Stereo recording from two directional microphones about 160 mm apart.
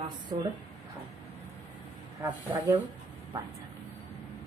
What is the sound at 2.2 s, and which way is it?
Speech, 20° right (ahead or behind).